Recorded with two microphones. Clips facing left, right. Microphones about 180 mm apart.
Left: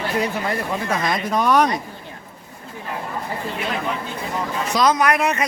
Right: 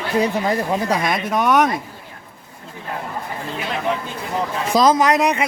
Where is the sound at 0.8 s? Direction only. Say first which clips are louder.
Right 3 dB; 15° right (ahead or behind).